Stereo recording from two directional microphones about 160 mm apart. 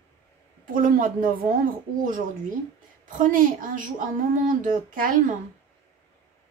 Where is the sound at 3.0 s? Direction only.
55° right (ahead or behind).